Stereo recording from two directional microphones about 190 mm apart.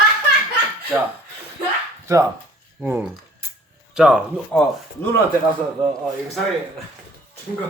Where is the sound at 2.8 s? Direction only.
10° right (ahead or behind).